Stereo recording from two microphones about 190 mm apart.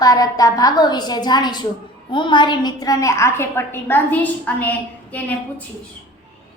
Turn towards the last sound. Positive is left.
turn(degrees=10)  # may be behind; listen again after turning